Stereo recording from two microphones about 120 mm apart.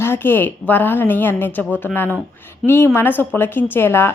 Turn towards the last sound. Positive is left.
turn(degrees=20)  # may be behind; listen again after turning